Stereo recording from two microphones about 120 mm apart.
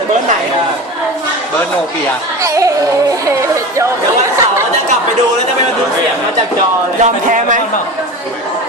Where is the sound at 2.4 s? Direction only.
25° right (ahead or behind).